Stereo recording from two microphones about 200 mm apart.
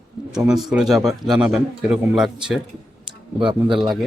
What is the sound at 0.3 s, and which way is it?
A man's voice, 5° right (ahead or behind).